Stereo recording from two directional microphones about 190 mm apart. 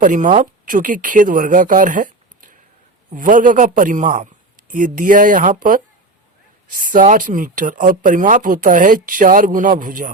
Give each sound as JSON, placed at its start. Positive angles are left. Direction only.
{"t": 0.0, "sound": "speech", "side_deg": -45}